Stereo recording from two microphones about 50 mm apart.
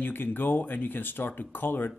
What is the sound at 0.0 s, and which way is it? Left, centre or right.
Speech, left.